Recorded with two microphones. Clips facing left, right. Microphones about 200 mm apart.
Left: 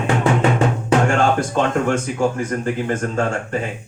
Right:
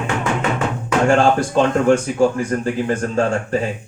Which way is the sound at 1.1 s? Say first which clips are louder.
Right 3 dB; 35° right (ahead or behind).